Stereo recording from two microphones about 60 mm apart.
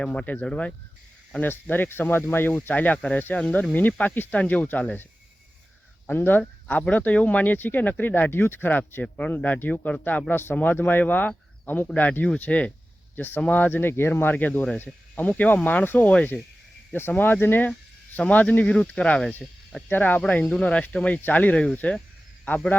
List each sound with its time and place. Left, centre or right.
0.0 s speech: left
1.4 s speech: left
6.1 s speech: left
6.8 s speech: left
9.1 s speech: left
13.1 s speech: left; by 19.3 s centre
19.9 s speech: left